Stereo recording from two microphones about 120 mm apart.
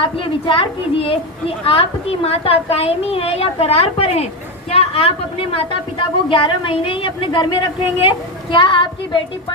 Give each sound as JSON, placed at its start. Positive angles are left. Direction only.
{"t": 0.0, "sound": "a woman's voice", "side_deg": 45}